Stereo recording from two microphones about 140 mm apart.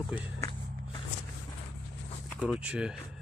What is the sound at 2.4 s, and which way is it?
Speech, 5° right (ahead or behind).